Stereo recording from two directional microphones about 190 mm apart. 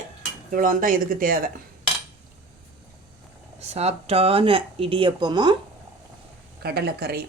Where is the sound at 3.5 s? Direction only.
35° right (ahead or behind).